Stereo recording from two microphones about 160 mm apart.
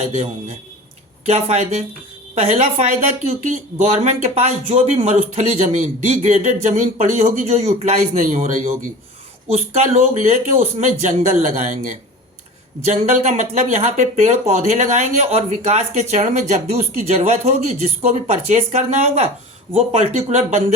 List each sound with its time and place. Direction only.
0.1 s speech: 45° right (ahead or behind)